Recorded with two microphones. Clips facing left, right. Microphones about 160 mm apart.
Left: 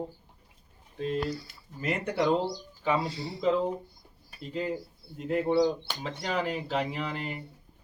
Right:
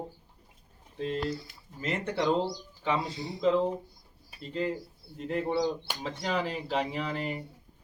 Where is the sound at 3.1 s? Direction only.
20° right (ahead or behind).